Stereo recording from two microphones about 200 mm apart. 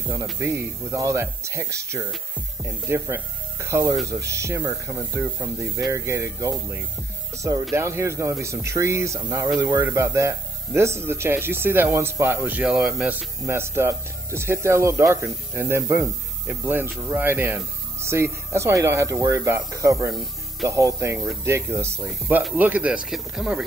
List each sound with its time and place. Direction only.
0.1 s speech: 15° right (ahead or behind)